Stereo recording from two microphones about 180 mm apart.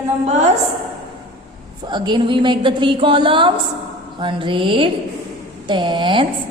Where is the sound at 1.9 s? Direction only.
25° right (ahead or behind).